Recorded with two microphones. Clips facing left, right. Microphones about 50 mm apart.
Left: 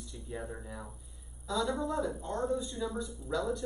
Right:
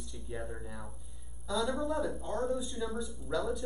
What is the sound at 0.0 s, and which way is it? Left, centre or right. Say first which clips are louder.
Speech: even; centre.